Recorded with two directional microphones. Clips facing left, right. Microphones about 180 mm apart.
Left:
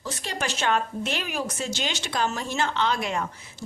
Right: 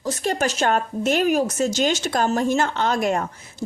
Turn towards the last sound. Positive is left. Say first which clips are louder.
# right 4 dB
turn(degrees=-45)  # may be behind; listen again after turning